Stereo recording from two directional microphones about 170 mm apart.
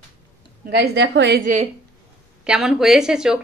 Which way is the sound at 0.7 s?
75° right (ahead or behind).